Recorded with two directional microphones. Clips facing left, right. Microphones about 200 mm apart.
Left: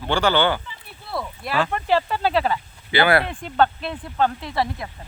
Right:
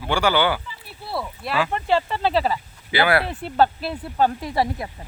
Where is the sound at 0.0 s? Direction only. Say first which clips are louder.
Left 1 dB; 10° right (ahead or behind).